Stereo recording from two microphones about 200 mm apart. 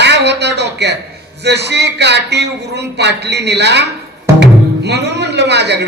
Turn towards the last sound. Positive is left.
turn(degrees=-55)  # may be behind; listen again after turning